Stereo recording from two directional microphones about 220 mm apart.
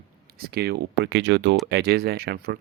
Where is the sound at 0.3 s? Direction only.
45° right (ahead or behind).